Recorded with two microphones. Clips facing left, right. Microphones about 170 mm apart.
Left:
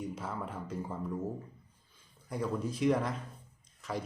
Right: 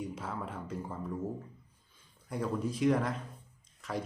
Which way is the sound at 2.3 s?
Centre (ahead or behind).